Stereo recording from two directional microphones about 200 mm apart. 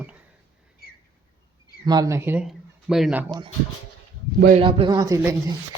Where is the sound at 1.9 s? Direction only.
20° right (ahead or behind).